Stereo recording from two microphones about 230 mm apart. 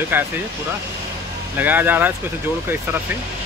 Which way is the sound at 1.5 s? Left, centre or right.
Centre.